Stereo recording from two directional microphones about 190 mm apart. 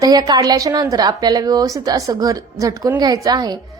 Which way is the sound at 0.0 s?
20° right (ahead or behind).